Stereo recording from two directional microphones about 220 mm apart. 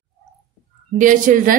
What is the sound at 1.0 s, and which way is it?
Speech, 35° right (ahead or behind).